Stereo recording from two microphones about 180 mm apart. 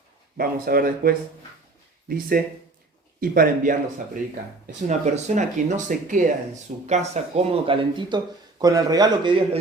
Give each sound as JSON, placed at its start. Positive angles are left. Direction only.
{"t": 0.3, "sound": "speech", "side_deg": -55}
{"t": 4.6, "sound": "speech", "side_deg": -40}